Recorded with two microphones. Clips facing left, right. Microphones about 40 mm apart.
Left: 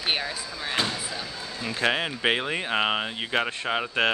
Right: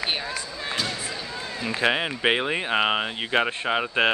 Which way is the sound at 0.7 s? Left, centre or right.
Left.